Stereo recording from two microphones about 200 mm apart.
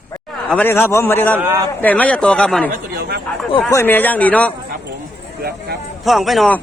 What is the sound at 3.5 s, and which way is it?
Speech, 10° left (ahead or behind).